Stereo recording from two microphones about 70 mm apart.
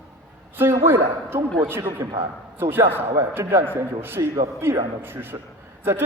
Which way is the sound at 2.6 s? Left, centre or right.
Right.